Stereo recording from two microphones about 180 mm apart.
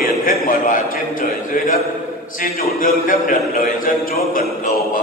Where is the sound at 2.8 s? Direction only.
50° left (ahead or behind).